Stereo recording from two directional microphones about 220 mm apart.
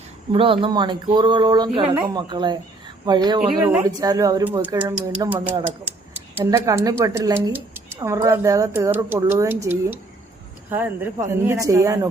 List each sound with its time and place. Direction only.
0.3 s speech: 25° right (ahead or behind)
3.5 s speech: 5° right (ahead or behind)